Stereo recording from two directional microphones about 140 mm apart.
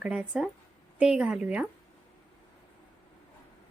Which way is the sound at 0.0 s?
10° right (ahead or behind).